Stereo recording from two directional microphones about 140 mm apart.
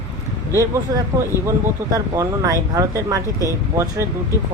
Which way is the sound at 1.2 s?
20° right (ahead or behind).